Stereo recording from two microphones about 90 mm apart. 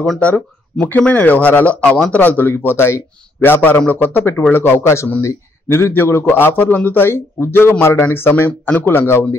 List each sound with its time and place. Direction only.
0.2 s speech: 15° left (ahead or behind)